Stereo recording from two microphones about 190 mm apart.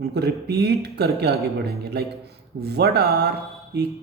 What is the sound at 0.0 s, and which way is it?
A man's voice, 55° right (ahead or behind).